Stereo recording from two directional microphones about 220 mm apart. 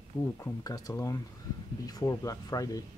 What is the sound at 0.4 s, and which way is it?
Speech, 15° left (ahead or behind).